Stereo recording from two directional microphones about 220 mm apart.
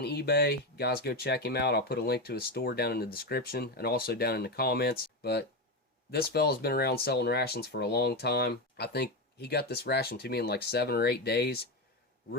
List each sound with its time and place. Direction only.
0.0 s speech: 50° left (ahead or behind)